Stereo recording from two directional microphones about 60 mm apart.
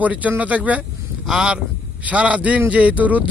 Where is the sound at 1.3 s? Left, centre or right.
Centre.